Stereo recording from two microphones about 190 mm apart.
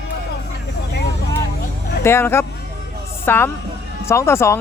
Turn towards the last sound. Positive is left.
turn(degrees=15)  # may be behind; listen again after turning